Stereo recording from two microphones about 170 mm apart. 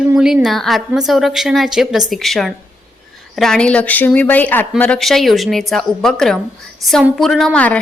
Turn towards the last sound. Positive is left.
turn(degrees=5)  # may be behind; listen again after turning